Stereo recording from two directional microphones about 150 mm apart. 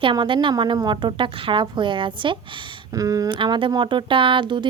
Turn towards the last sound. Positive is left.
turn(degrees=-30)  # may be behind; listen again after turning